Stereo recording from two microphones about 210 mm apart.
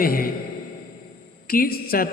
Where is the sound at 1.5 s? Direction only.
45° left (ahead or behind).